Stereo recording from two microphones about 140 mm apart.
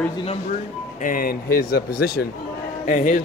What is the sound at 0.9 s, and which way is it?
Speech, 80° left.